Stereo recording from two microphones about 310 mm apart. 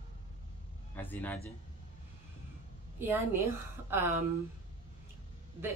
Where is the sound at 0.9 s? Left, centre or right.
Centre.